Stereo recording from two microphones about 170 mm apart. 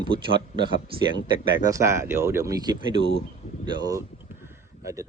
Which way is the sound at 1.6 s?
15° right (ahead or behind).